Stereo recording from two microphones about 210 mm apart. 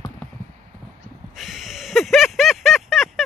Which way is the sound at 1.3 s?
Centre (ahead or behind).